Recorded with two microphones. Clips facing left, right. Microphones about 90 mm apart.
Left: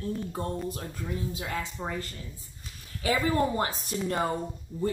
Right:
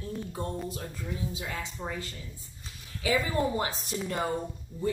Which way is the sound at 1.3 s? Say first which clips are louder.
Left 3 dB; 50° left (ahead or behind).